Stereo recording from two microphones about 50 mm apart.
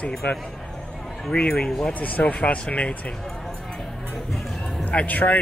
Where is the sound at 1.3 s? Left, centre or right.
Left.